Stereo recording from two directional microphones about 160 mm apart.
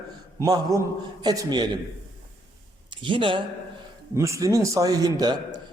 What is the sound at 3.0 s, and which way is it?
Speech, 30° right (ahead or behind).